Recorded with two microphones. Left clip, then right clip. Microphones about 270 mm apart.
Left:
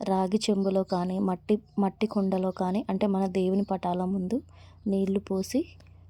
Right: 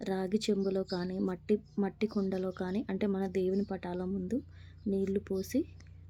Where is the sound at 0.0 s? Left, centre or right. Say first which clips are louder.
Left 7 dB; left.